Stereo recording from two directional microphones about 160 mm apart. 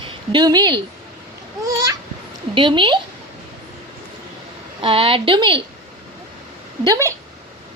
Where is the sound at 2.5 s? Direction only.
30° right (ahead or behind).